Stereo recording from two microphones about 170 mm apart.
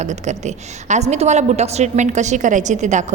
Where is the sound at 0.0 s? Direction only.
45° right (ahead or behind).